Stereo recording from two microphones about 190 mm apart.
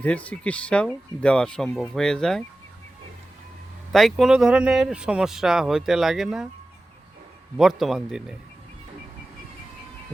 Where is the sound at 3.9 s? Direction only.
Centre (ahead or behind).